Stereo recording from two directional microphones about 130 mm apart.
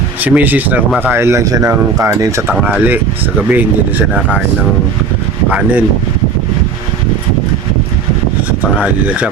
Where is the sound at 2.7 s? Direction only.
15° right (ahead or behind).